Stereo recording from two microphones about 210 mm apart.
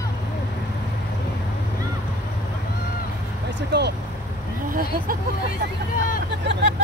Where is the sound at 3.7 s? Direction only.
55° right (ahead or behind).